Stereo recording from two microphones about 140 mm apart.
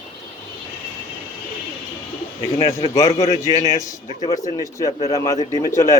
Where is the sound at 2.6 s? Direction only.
20° left (ahead or behind).